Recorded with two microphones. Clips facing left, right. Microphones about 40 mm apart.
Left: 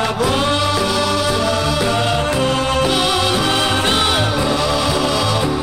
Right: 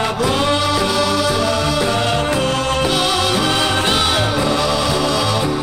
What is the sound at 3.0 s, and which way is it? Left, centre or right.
Music, centre.